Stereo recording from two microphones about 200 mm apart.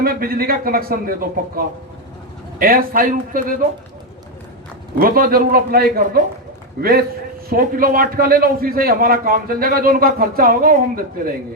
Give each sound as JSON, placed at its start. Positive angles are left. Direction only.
{"t": 0.0, "sound": "a man's voice", "side_deg": -50}
{"t": 2.6, "sound": "a man's voice", "side_deg": -45}
{"t": 4.9, "sound": "a man's voice", "side_deg": -45}
{"t": 7.5, "sound": "a man's voice", "side_deg": -45}